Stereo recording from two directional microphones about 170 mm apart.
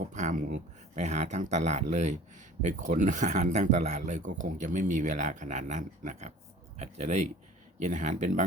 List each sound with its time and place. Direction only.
0.0 s speech: 45° right (ahead or behind)